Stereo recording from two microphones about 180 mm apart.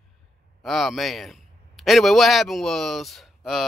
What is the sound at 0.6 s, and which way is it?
Speech, centre (ahead or behind).